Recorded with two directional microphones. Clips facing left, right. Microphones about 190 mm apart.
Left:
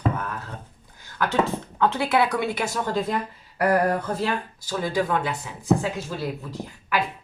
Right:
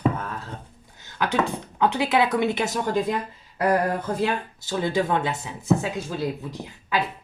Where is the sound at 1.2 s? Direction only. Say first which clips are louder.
Left 1 dB; 15° right (ahead or behind).